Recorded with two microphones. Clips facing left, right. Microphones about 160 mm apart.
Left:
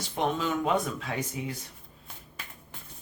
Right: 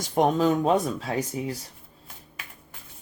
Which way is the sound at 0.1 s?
40° right (ahead or behind).